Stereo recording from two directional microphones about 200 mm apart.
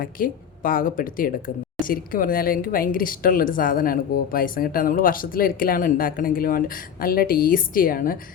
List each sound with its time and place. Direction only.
0.0 s speech: 45° left (ahead or behind)